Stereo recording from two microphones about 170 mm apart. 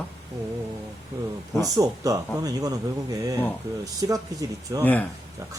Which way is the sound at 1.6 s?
20° right (ahead or behind).